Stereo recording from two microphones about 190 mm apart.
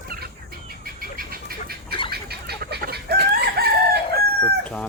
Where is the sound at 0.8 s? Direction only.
50° right (ahead or behind).